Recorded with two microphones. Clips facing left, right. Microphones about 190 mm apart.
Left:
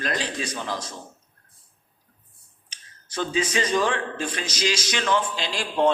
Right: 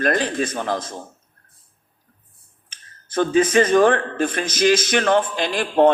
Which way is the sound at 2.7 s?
55° right (ahead or behind).